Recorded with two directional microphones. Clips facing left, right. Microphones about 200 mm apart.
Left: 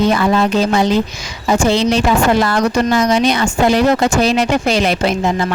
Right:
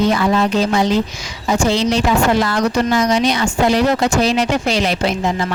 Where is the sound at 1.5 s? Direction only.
55° left (ahead or behind).